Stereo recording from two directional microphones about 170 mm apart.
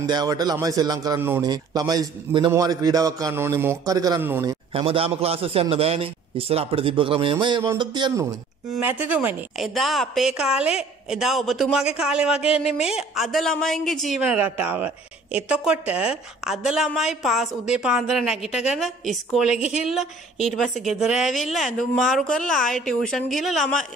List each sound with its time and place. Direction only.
0.0 s a man's voice: 25° right (ahead or behind)
4.7 s a man's voice: 35° right (ahead or behind)
8.7 s speech: 10° right (ahead or behind)
9.6 s a woman's voice: centre (ahead or behind)